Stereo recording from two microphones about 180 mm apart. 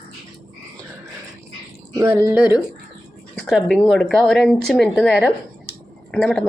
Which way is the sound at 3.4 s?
5° left (ahead or behind).